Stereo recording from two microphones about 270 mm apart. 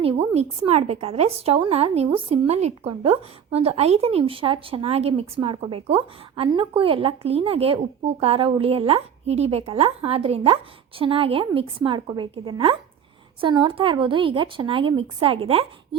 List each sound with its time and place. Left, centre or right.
0.0 s a woman's voice: right